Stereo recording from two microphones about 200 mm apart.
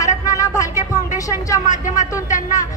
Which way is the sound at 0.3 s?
15° left (ahead or behind).